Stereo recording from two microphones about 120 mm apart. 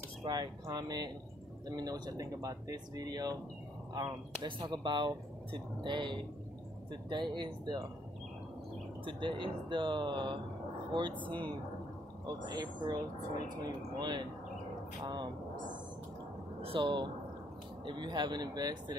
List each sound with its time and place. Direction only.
0.2 s speech: 35° right (ahead or behind)
9.0 s speech: 45° right (ahead or behind)
16.6 s speech: 45° right (ahead or behind)